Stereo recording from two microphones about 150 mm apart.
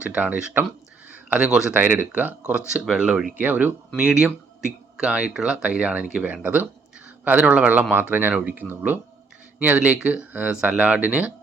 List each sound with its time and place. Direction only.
0.0 s speech: 10° right (ahead or behind)